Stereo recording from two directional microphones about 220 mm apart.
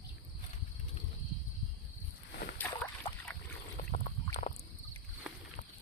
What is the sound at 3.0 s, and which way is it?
Boat, 20° left (ahead or behind).